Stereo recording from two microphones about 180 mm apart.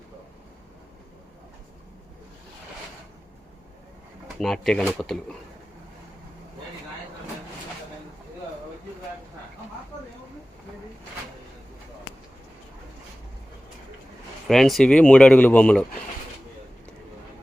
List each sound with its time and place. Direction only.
4.4 s speech: 5° left (ahead or behind)
14.4 s speech: centre (ahead or behind)